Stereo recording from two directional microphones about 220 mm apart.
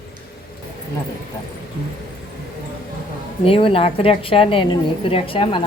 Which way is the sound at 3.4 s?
25° left (ahead or behind).